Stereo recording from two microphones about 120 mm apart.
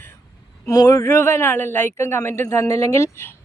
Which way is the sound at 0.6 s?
30° left (ahead or behind).